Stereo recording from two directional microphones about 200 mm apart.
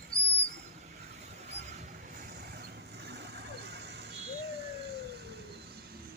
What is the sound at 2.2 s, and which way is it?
Vehicle, 50° right (ahead or behind).